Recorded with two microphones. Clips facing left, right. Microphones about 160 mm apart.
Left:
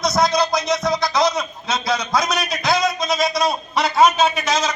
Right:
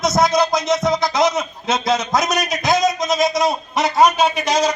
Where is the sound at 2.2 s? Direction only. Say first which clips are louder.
Right 2 dB; 45° right (ahead or behind).